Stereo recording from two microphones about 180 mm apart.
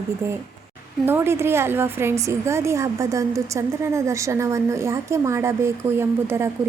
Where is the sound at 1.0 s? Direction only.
15° right (ahead or behind).